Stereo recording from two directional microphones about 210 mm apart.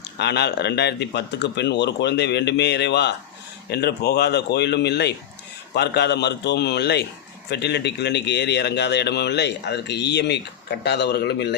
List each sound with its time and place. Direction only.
0.2 s a man's voice: 55° left (ahead or behind)